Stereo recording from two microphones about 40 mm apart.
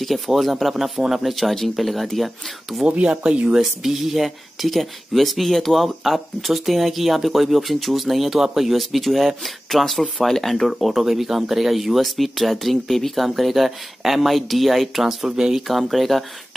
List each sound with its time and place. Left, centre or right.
0.0 s speech: centre
3.0 s speech: right
3.5 s speech: centre
15.6 s speech: centre